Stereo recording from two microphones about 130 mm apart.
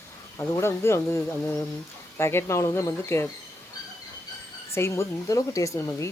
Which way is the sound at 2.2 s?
20° left (ahead or behind).